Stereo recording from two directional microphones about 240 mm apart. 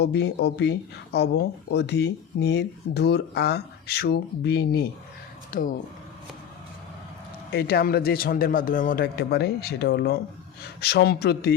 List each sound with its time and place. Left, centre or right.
0.0 s speech: left
7.5 s speech: left